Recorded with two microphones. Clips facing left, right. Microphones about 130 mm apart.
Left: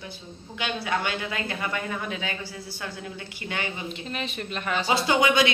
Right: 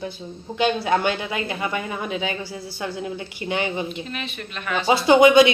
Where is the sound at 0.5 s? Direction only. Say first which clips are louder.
Right 8 dB; 30° right (ahead or behind).